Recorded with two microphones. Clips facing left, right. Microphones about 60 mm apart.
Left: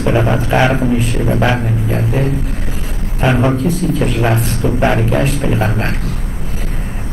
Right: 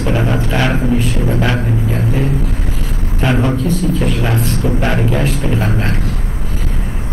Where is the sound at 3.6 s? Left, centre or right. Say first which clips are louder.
Even; centre.